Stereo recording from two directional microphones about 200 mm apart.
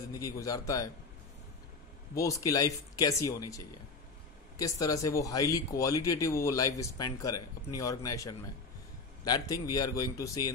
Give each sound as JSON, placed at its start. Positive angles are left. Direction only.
{"t": 0.2, "sound": "speech", "side_deg": 15}
{"t": 2.1, "sound": "speech", "side_deg": 15}